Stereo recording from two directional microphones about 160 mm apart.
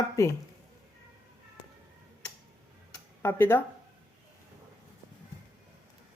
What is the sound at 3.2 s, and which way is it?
Speech, 15° left (ahead or behind).